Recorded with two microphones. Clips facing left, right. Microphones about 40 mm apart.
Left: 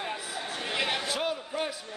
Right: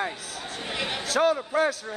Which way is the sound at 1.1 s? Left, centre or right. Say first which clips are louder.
Right 8 dB; right.